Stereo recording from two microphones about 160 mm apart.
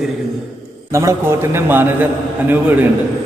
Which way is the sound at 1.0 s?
15° right (ahead or behind).